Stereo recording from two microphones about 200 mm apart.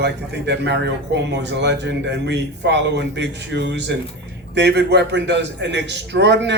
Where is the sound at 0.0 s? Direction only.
55° right (ahead or behind).